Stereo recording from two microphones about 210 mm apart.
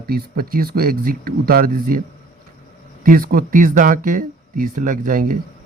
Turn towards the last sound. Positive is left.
turn(degrees=-40)  # may be behind; listen again after turning